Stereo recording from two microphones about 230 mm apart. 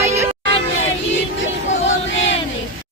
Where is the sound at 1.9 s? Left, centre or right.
Left.